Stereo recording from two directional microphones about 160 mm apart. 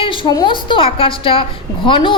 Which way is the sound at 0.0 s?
30° left (ahead or behind).